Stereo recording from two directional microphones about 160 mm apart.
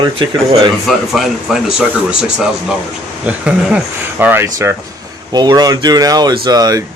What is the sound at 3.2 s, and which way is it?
Speech, 10° right (ahead or behind).